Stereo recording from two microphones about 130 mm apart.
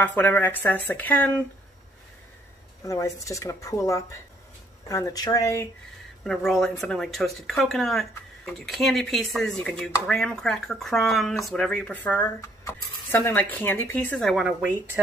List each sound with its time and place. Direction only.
0.0 s speech: 15° left (ahead or behind)
2.8 s speech: 25° left (ahead or behind)
6.2 s speech: centre (ahead or behind)
14.2 s speech: 5° right (ahead or behind)